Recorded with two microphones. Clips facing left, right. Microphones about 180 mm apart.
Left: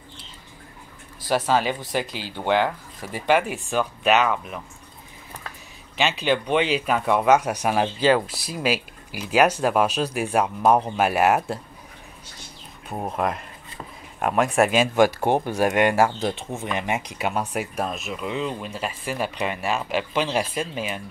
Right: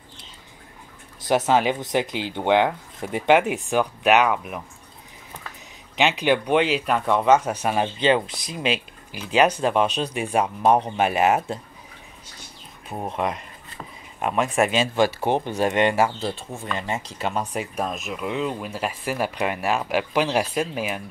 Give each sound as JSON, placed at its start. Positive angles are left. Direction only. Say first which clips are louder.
{"t": 1.2, "sound": "speech", "louder": "right 2 dB", "side_deg": -20}
{"t": 5.9, "sound": "speech", "louder": "right 2 dB", "side_deg": -15}
{"t": 12.9, "sound": "speech", "louder": "left 1 dB", "side_deg": 5}
{"t": 14.2, "sound": "speech", "louder": "left 2 dB", "side_deg": 55}
{"t": 14.7, "sound": "speech", "louder": "left 2 dB", "side_deg": 10}